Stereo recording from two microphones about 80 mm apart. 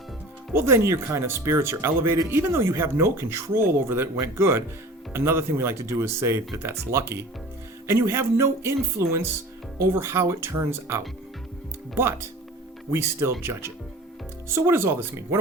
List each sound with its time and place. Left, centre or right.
0.5 s speech: right
12.9 s speech: right